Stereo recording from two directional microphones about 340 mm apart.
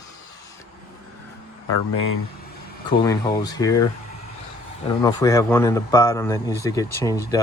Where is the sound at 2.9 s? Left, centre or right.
Centre.